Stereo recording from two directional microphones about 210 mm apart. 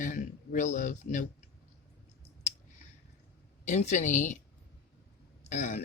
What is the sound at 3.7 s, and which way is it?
Speech, 35° left (ahead or behind).